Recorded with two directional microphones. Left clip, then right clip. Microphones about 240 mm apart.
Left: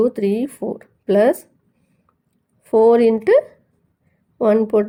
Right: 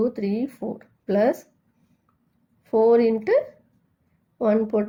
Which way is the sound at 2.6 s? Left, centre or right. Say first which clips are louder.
Left 5 dB; left.